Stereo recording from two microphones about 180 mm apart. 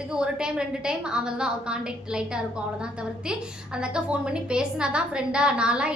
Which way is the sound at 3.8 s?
5° right (ahead or behind).